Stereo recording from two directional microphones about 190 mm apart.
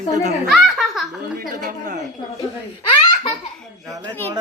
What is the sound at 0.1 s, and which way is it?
Speech, 40° right (ahead or behind).